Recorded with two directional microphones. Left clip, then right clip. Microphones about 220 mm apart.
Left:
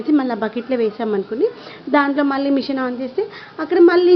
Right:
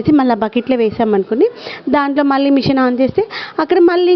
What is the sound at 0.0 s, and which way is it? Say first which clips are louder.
A woman's voice: right 6 dB; 35° right (ahead or behind).